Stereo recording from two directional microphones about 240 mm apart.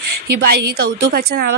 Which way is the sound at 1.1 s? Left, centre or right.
Right.